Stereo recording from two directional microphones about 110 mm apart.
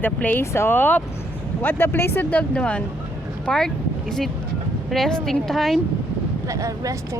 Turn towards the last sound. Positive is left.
turn(degrees=-30)  # may be behind; listen again after turning